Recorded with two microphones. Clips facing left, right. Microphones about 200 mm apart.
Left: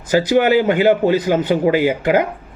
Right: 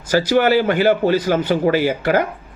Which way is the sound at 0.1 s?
20° left (ahead or behind).